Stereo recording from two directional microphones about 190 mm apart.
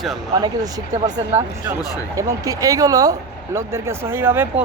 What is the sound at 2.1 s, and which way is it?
Speech, 20° right (ahead or behind).